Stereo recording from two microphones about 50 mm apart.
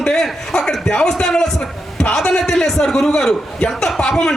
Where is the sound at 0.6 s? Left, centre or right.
Centre.